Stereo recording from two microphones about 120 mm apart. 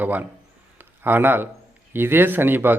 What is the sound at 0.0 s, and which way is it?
Speech, 15° right (ahead or behind).